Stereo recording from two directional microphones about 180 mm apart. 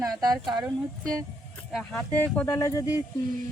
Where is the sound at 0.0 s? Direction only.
20° right (ahead or behind).